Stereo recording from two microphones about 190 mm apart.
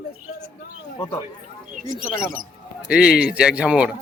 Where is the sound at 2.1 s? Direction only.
45° right (ahead or behind).